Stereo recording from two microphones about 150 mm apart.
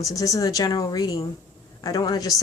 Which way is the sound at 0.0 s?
20° left (ahead or behind).